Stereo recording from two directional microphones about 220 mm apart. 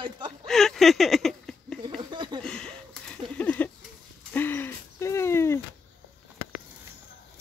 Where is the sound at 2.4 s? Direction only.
5° left (ahead or behind).